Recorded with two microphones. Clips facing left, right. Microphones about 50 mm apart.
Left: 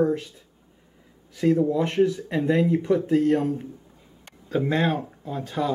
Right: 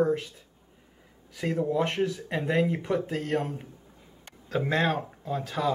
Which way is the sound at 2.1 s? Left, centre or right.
Centre.